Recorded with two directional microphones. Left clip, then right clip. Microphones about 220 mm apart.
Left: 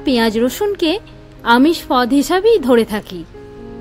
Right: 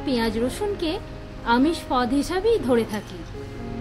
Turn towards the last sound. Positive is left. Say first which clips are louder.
# left 9 dB
turn(degrees=30)  # may be behind; listen again after turning